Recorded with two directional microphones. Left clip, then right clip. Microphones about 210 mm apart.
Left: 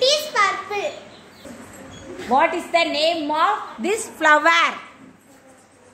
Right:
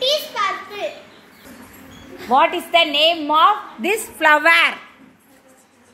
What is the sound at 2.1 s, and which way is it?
A woman's voice, 10° right (ahead or behind).